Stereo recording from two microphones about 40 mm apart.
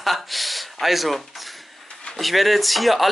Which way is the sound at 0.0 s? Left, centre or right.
Centre.